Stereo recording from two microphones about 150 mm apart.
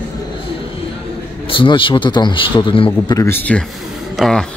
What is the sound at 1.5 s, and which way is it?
Speech, 35° left (ahead or behind).